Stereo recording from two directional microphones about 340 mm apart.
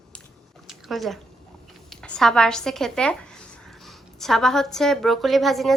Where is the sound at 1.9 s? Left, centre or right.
Centre.